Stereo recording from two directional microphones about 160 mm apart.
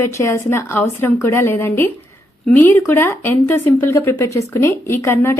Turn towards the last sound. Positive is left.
turn(degrees=15)  # may be behind; listen again after turning